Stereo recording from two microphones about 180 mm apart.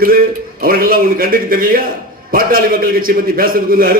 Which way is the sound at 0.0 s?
55° right (ahead or behind).